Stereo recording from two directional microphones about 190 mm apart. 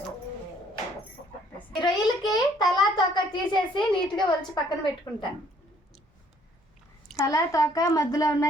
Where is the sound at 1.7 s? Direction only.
20° left (ahead or behind).